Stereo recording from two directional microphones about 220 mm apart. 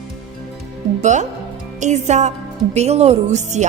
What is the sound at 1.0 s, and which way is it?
A woman's voice, 35° right (ahead or behind).